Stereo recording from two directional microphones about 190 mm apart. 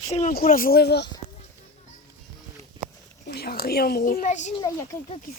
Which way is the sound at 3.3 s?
55° left (ahead or behind).